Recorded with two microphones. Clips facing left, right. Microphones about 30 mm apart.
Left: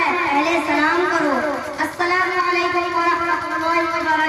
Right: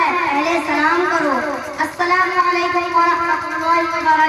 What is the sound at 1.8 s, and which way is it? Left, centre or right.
Child singing, right.